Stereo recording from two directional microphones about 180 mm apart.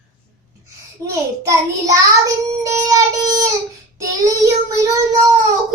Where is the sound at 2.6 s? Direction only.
15° right (ahead or behind).